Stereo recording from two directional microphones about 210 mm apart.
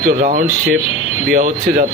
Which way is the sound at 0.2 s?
40° right (ahead or behind).